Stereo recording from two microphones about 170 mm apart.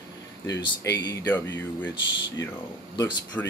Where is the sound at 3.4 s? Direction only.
10° left (ahead or behind).